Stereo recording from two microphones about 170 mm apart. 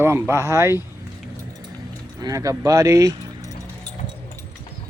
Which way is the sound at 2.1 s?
20° right (ahead or behind).